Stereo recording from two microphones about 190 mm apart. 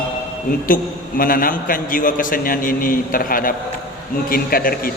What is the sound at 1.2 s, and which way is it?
A man's voice, 50° left (ahead or behind).